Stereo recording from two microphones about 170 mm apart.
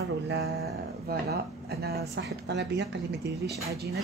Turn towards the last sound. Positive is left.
turn(degrees=-65)  # may be behind; listen again after turning